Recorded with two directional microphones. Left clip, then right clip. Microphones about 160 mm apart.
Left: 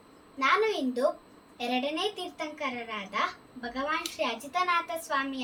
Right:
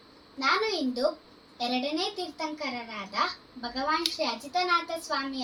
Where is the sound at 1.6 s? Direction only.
5° left (ahead or behind).